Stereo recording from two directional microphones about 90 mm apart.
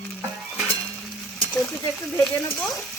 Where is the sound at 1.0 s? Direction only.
Centre (ahead or behind).